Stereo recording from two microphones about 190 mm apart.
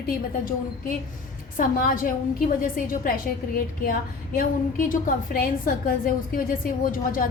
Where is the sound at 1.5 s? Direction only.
45° left (ahead or behind).